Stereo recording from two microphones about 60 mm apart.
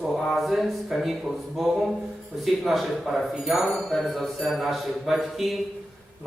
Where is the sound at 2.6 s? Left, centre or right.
Centre.